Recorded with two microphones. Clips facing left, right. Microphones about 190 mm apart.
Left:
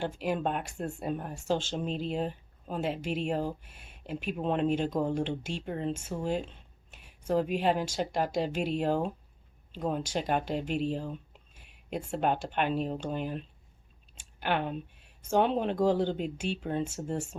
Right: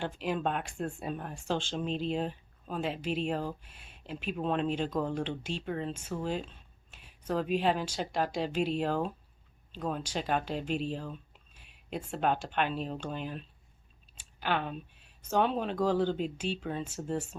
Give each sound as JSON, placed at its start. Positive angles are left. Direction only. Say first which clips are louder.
{"t": 0.0, "sound": "speech", "louder": "left 2 dB", "side_deg": 10}
{"t": 3.6, "sound": "speech", "louder": "left 3 dB", "side_deg": 50}
{"t": 4.1, "sound": "speech", "louder": "left 1 dB", "side_deg": 10}
{"t": 14.4, "sound": "speech", "louder": "left 2 dB", "side_deg": 15}